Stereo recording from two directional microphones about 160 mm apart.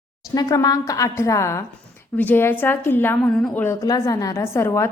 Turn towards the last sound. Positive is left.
turn(degrees=15)  # may be behind; listen again after turning